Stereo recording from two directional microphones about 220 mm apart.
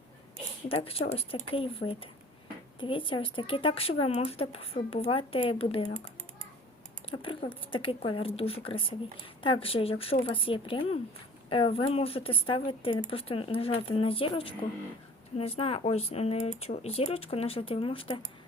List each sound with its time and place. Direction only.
0.7 s speech: 25° left (ahead or behind)
7.1 s speech: 25° left (ahead or behind)